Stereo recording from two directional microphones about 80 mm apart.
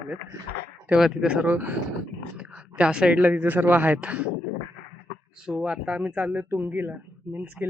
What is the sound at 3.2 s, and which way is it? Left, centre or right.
Speech, right.